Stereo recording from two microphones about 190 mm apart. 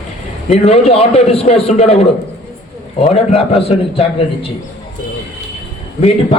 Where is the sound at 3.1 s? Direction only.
30° left (ahead or behind).